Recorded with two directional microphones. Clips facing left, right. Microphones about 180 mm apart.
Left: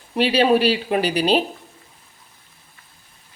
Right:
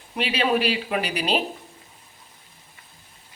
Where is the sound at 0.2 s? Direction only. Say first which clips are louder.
Left 6 dB; 35° left (ahead or behind).